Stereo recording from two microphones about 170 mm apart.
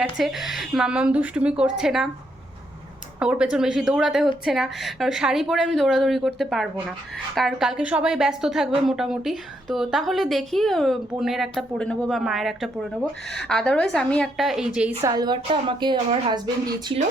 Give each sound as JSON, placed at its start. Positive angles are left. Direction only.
{"t": 0.0, "sound": "a woman's voice", "side_deg": 0}
{"t": 3.2, "sound": "a woman's voice", "side_deg": -5}
{"t": 15.0, "sound": "speech", "side_deg": -25}